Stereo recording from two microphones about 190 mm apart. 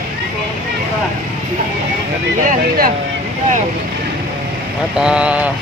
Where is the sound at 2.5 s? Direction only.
50° right (ahead or behind).